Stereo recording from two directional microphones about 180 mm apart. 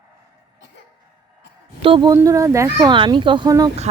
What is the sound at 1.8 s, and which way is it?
Speech, 30° right (ahead or behind).